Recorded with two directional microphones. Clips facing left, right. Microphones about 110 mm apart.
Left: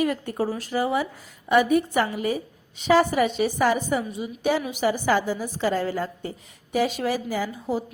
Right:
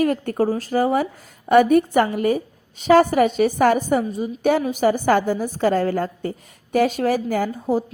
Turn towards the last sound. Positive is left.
turn(degrees=-50)  # may be behind; listen again after turning